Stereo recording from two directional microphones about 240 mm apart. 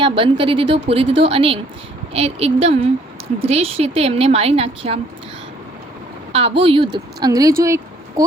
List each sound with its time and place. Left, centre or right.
0.0 s a woman's voice: right
6.3 s a woman's voice: right
7.6 s a sound: centre